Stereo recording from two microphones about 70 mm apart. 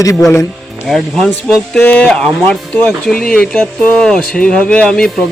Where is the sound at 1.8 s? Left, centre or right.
Left.